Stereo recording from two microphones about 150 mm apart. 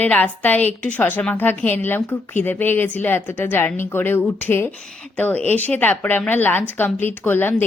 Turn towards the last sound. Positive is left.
turn(degrees=15)  # may be behind; listen again after turning